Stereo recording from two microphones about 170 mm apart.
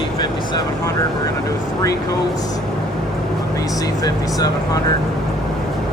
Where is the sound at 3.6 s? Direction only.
20° left (ahead or behind).